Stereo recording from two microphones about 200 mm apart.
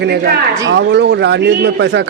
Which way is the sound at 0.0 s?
55° right (ahead or behind).